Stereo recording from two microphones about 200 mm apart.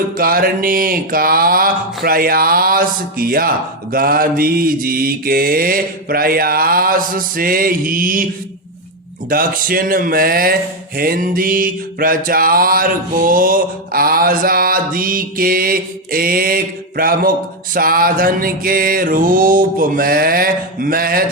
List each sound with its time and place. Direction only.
0.2 s speech: 45° right (ahead or behind)
9.3 s speech: 45° right (ahead or behind)